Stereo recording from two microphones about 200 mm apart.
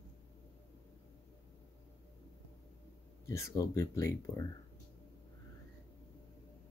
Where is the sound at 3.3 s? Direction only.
15° left (ahead or behind).